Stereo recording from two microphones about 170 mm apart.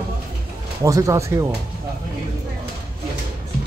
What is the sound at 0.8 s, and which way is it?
Speech, 20° right (ahead or behind).